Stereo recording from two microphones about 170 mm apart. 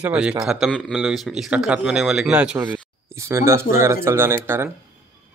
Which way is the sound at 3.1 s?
15° right (ahead or behind).